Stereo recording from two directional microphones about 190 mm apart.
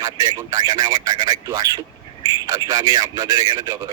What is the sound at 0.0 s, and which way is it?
A man's voice, 20° right (ahead or behind).